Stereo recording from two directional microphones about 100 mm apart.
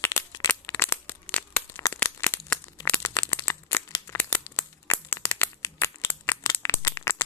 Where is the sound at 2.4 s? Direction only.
15° left (ahead or behind).